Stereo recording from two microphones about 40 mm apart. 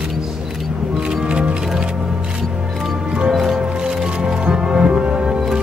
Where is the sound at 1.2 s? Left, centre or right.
Right.